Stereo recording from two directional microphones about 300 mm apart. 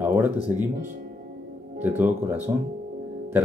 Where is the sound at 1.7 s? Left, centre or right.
Centre.